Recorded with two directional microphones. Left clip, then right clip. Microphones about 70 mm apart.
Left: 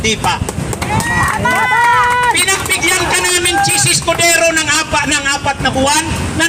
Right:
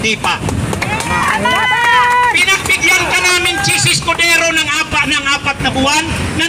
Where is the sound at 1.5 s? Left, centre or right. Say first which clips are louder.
Left 1 dB; centre.